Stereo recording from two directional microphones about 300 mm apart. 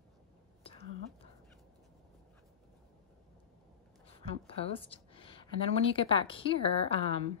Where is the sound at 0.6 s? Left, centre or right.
Centre.